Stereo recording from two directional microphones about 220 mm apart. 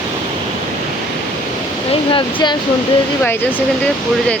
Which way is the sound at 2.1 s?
20° left (ahead or behind).